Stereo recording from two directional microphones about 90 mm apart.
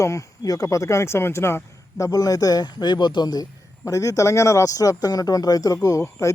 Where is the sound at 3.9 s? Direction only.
35° left (ahead or behind).